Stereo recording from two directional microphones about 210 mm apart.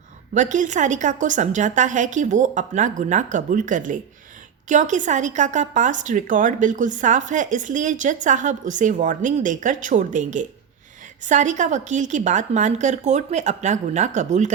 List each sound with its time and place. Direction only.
0.3 s a woman's voice: 35° right (ahead or behind)